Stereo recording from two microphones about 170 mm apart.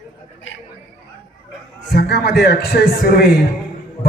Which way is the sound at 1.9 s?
75° left (ahead or behind).